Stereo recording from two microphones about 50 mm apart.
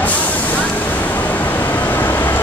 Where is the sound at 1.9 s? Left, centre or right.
Left.